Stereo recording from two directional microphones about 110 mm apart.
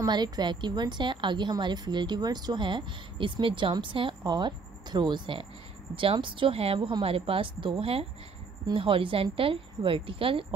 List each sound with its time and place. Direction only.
0.0 s a woman's voice: 40° right (ahead or behind)